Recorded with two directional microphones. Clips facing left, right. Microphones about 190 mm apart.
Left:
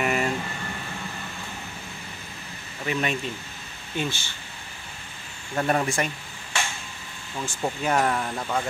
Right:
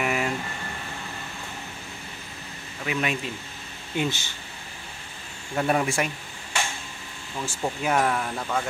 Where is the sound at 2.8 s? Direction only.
5° right (ahead or behind).